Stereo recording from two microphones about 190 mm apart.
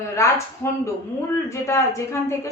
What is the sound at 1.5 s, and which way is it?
A woman's voice, 15° left (ahead or behind).